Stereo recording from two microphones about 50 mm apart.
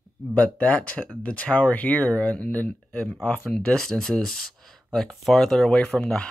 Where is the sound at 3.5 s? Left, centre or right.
Centre.